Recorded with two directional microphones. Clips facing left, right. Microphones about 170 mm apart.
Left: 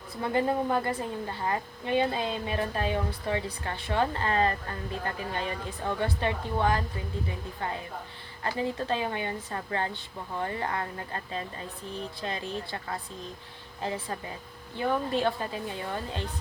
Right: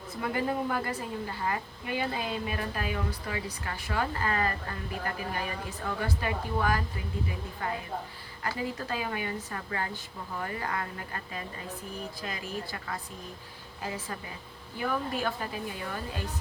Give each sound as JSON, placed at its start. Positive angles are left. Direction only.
{"t": 0.2, "sound": "a woman's voice", "side_deg": 25}
{"t": 8.4, "sound": "a woman's voice", "side_deg": 25}